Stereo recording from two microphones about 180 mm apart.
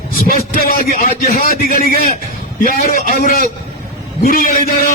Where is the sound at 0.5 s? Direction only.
50° left (ahead or behind).